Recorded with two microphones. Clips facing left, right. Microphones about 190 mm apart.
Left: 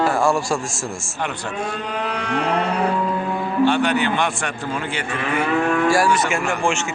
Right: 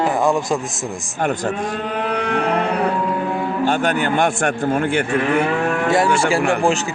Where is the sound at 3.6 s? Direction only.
45° right (ahead or behind).